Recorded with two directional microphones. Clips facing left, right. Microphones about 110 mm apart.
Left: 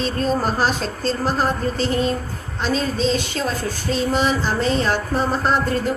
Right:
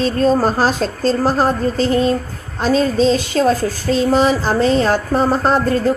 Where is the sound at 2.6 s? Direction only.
40° right (ahead or behind).